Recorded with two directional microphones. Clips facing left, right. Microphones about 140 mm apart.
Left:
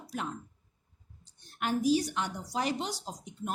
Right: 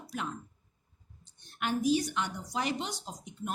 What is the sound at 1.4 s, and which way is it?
Speech, 40° left (ahead or behind).